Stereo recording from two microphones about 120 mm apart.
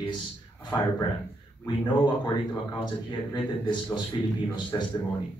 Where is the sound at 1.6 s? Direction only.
40° left (ahead or behind).